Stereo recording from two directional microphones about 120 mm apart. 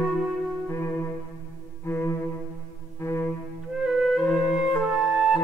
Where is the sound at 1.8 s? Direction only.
20° left (ahead or behind).